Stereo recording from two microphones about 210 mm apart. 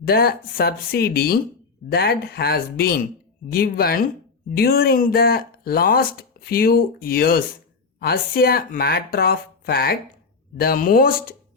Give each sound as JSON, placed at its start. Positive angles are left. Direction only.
{"t": 0.0, "sound": "speech", "side_deg": 45}